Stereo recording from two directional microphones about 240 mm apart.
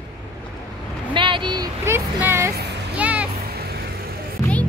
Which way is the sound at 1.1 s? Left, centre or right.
Centre.